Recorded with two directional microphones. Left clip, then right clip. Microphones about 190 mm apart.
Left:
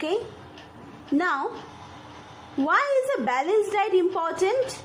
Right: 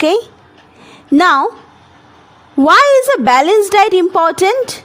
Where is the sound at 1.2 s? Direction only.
70° right (ahead or behind).